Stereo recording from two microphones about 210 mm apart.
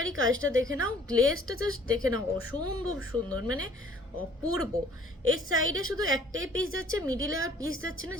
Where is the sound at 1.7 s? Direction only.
85° right.